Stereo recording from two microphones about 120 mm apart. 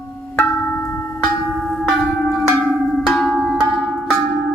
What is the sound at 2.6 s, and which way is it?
Tubular bells, 5° left (ahead or behind).